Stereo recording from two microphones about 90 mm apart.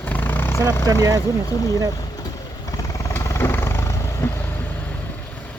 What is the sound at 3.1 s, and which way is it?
Vehicle, 30° left (ahead or behind).